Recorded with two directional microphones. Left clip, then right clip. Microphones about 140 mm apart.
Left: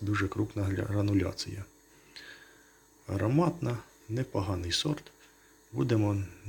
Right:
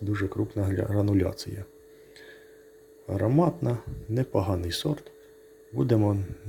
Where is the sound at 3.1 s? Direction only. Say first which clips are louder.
Right 4 dB; 25° right (ahead or behind).